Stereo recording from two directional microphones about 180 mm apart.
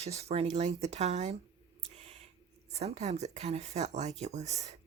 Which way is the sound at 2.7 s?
35° right (ahead or behind).